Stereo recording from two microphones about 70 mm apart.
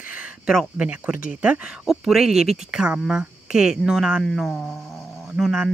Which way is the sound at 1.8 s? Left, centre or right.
Centre.